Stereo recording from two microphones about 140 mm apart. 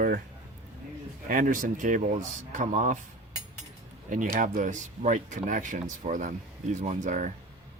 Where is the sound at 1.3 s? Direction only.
75° right (ahead or behind).